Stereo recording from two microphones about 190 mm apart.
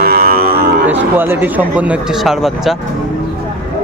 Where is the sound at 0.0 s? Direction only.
55° right (ahead or behind).